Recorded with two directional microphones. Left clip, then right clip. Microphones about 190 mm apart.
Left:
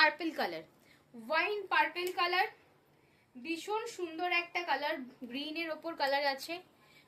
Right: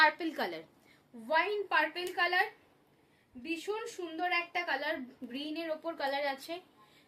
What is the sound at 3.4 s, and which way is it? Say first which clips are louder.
A woman's voice: left 1 dB; 15° right (ahead or behind).